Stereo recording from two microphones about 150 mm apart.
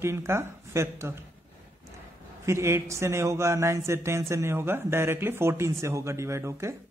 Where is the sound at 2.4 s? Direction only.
20° right (ahead or behind).